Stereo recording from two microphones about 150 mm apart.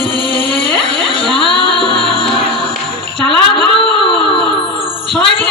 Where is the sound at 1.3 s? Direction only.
35° left (ahead or behind).